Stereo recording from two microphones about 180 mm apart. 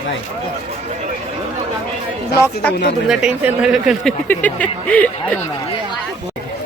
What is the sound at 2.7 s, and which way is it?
Speech, 70° left (ahead or behind).